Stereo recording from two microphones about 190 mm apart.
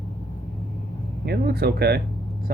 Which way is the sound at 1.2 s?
55° right (ahead or behind).